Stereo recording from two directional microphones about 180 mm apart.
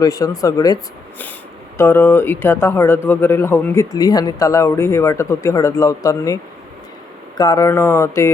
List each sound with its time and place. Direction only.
0.0 s speech: 20° left (ahead or behind)
1.8 s a man's voice: 15° left (ahead or behind)